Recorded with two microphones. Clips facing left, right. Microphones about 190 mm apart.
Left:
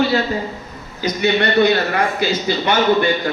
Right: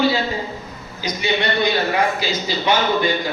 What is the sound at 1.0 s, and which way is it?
A man's voice, 55° left (ahead or behind).